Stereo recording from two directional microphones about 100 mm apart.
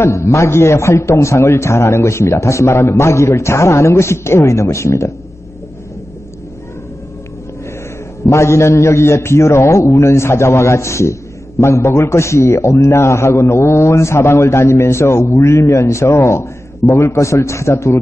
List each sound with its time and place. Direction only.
0.0 s a man's voice: 30° left (ahead or behind)
8.3 s a man's voice: 30° left (ahead or behind)